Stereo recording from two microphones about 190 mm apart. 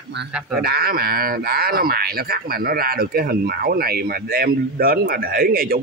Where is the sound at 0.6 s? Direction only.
55° right (ahead or behind).